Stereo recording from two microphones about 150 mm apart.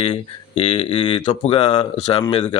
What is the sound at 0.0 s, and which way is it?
A man's voice, 40° left (ahead or behind).